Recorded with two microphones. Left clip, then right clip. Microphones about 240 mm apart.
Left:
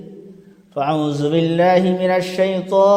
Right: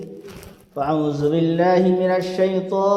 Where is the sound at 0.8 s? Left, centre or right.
Left.